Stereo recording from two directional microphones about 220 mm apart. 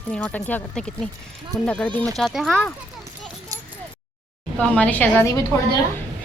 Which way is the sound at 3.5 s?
15° right (ahead or behind).